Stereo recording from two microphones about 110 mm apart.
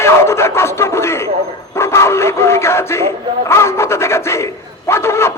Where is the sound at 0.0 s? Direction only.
25° left (ahead or behind).